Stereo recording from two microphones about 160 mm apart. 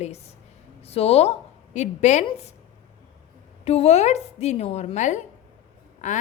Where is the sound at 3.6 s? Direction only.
40° left (ahead or behind).